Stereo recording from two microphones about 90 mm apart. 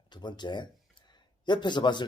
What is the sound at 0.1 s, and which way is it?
Speech, 55° left (ahead or behind).